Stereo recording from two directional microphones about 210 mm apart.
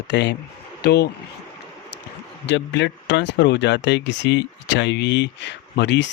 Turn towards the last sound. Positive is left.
turn(degrees=55)  # may be behind; listen again after turning